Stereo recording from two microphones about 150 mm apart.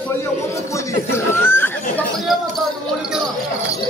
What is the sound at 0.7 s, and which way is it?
Speech, 15° left (ahead or behind).